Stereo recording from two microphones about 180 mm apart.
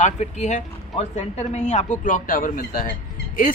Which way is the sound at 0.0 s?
40° left (ahead or behind).